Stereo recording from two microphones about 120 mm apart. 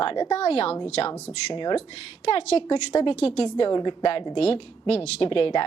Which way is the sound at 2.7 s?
45° left (ahead or behind).